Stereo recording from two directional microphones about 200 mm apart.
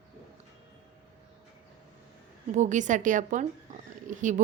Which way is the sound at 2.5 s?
35° right (ahead or behind).